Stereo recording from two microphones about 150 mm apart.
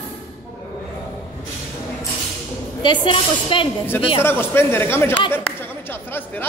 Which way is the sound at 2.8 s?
35° left (ahead or behind).